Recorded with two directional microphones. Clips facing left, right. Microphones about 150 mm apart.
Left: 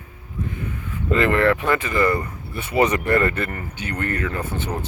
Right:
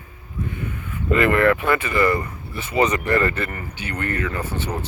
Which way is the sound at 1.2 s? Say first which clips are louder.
Right 1 dB; 30° left (ahead or behind).